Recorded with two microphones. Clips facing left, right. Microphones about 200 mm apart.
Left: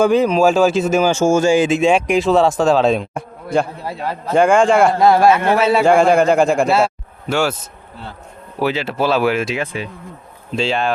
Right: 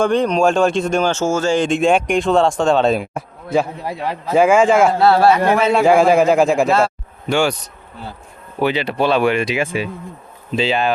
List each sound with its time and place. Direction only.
0.0 s speech: 5° left (ahead or behind)
3.8 s a man's voice: 15° right (ahead or behind)
4.3 s speech: 5° right (ahead or behind)
4.9 s speech: 15° left (ahead or behind)
5.7 s speech: centre (ahead or behind)
9.6 s a man's voice: 10° right (ahead or behind)